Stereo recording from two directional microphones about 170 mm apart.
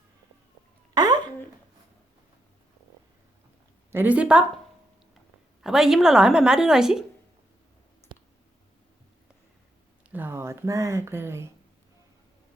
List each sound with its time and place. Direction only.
0.9 s a sound: 25° right (ahead or behind)
3.9 s a woman's voice: 10° right (ahead or behind)
5.6 s a woman's voice: centre (ahead or behind)
10.1 s speech: 10° right (ahead or behind)